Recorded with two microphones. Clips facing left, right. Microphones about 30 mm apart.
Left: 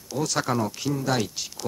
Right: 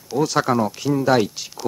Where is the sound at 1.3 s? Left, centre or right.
Centre.